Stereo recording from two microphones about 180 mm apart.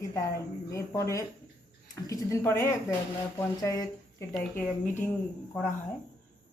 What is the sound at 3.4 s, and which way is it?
Speech, 20° left (ahead or behind).